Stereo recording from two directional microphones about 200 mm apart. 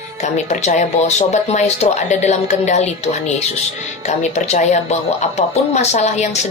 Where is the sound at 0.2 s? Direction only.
35° left (ahead or behind).